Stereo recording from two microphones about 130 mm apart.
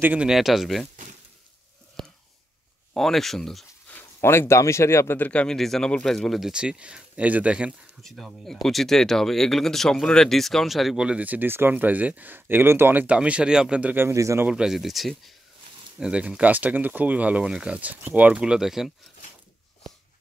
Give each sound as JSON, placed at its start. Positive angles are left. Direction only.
{"t": 0.0, "sound": "speech", "side_deg": -10}
{"t": 2.9, "sound": "speech", "side_deg": 0}
{"t": 3.9, "sound": "speech", "side_deg": 20}
{"t": 8.0, "sound": "speech", "side_deg": 0}
{"t": 14.5, "sound": "speech", "side_deg": -5}